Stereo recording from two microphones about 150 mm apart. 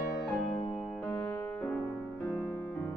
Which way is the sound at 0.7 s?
5° left (ahead or behind).